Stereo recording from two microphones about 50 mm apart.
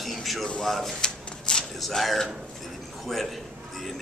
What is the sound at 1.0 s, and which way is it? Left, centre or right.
Shuffling cards, centre.